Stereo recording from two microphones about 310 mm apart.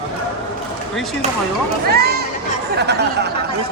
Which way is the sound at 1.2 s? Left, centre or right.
Right.